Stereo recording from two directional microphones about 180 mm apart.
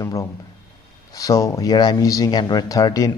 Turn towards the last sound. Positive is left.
turn(degrees=20)  # may be behind; listen again after turning